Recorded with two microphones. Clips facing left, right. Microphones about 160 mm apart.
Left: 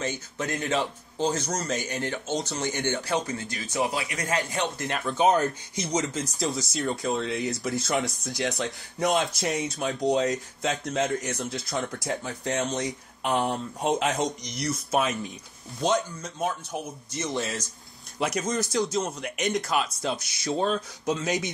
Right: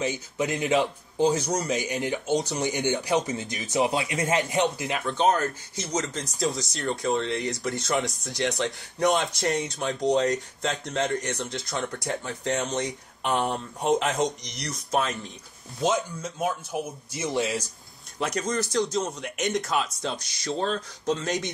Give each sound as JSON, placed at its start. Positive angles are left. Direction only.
{"t": 0.0, "sound": "speech", "side_deg": -15}
{"t": 4.7, "sound": "speech", "side_deg": 0}
{"t": 5.1, "sound": "speech", "side_deg": 15}
{"t": 6.0, "sound": "speech", "side_deg": 0}
{"t": 15.8, "sound": "speech", "side_deg": 0}
{"t": 18.2, "sound": "speech", "side_deg": 5}